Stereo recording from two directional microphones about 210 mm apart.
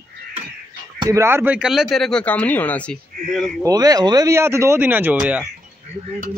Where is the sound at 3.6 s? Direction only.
15° right (ahead or behind).